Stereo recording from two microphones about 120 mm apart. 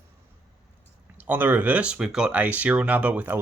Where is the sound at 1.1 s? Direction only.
15° right (ahead or behind).